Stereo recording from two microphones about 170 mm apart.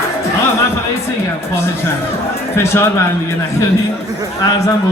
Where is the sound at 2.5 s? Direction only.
15° left (ahead or behind).